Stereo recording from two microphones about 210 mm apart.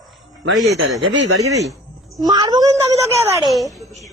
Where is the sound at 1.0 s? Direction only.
60° right (ahead or behind).